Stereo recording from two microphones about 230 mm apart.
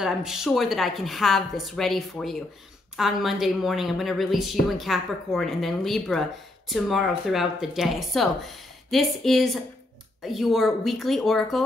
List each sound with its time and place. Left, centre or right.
0.0 s a woman's voice: centre